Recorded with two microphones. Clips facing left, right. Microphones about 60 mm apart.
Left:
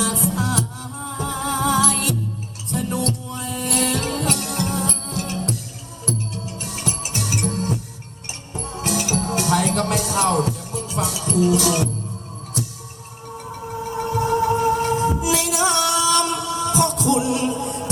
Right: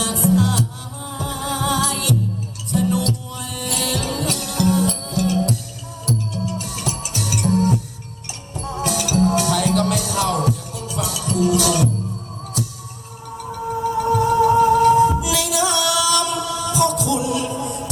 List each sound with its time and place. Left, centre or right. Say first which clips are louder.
0.0 s music: right 4 dB; left
7.5 s music: right 7 dB; right
8.8 s music: right 4 dB; left
14.0 s music: right 4 dB; left